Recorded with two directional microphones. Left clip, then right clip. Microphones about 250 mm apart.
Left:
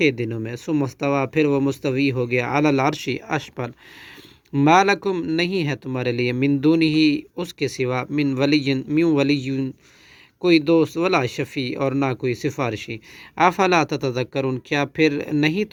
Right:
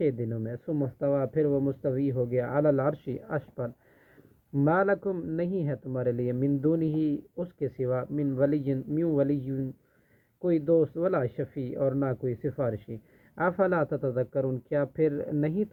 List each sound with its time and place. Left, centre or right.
0.1 s speech: left
7.6 s speech: left